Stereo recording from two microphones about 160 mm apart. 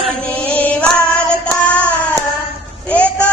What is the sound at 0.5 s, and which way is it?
Female singing, 10° left (ahead or behind).